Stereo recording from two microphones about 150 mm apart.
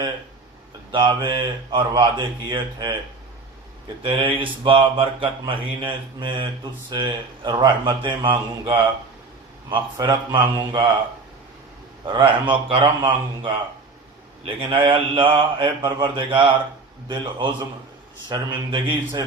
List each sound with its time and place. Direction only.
0.9 s speech: 30° right (ahead or behind)
4.0 s speech: 35° right (ahead or behind)
12.0 s speech: 35° right (ahead or behind)